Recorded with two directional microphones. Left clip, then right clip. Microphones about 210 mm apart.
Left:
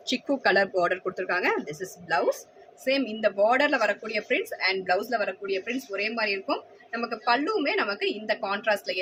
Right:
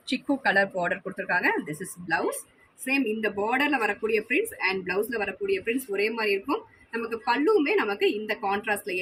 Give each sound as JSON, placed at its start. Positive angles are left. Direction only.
{"t": 0.1, "sound": "speech", "side_deg": 40}
{"t": 2.8, "sound": "a woman's voice", "side_deg": 30}